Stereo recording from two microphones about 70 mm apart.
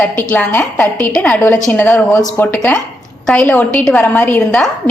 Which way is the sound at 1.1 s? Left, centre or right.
Centre.